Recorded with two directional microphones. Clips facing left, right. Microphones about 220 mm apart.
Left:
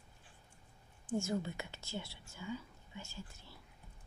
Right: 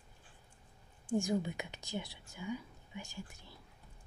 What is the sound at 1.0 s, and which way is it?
Speech, 15° right (ahead or behind).